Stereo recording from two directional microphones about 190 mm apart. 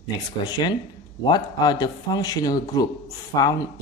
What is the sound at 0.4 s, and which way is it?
Speech, 20° left (ahead or behind).